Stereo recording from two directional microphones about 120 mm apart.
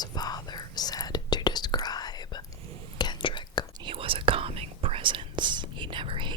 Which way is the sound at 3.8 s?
50° right (ahead or behind).